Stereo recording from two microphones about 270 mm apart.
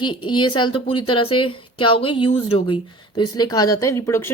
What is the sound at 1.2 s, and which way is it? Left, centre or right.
Speech, left.